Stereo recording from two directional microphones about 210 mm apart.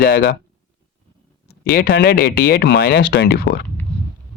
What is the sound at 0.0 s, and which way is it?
Speech, 50° left (ahead or behind).